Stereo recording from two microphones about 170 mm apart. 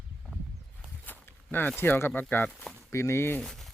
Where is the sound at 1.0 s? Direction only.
10° left (ahead or behind).